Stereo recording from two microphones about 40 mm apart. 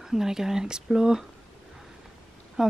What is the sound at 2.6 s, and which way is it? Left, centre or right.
Speech, centre.